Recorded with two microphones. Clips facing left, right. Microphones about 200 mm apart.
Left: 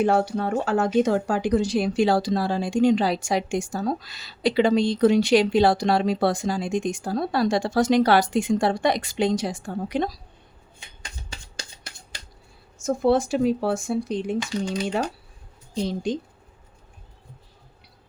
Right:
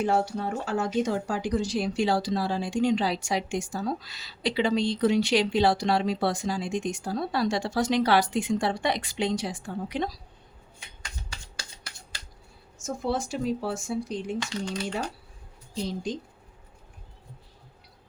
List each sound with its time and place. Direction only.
0.0 s speech: 65° left (ahead or behind); by 10.1 s 45° left (ahead or behind)
12.8 s speech: 60° left (ahead or behind)
14.3 s speech: 20° left (ahead or behind)